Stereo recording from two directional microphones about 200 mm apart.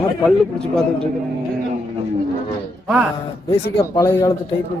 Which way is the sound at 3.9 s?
15° left (ahead or behind).